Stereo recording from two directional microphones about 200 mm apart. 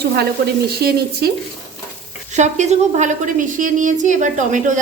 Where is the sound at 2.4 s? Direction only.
35° right (ahead or behind).